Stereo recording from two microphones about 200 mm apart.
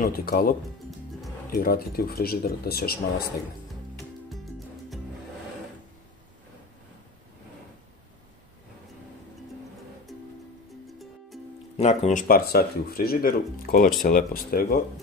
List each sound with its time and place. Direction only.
0.0 s speech: 50° left (ahead or behind)
11.7 s speech: 35° left (ahead or behind)